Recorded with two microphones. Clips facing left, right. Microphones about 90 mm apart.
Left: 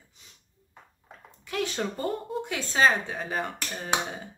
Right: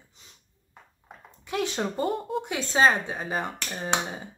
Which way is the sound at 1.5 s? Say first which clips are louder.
Right 2 dB; 20° right (ahead or behind).